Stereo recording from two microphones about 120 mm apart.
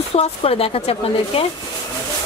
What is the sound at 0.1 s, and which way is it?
Speech, 55° left (ahead or behind).